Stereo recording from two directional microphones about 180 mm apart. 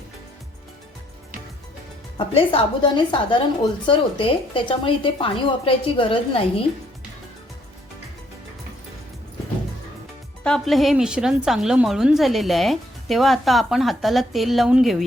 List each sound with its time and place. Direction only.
2.1 s a woman's voice: 30° left (ahead or behind)
10.4 s a woman's voice: centre (ahead or behind)